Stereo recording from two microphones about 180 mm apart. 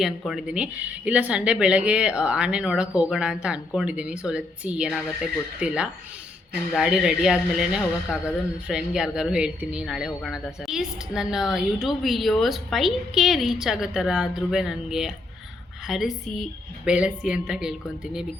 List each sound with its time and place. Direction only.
0.3 s speech: 5° right (ahead or behind)